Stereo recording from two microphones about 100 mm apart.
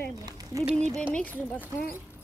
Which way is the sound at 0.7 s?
10° left (ahead or behind).